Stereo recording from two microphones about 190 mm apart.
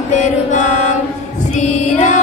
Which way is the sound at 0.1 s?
40° left (ahead or behind).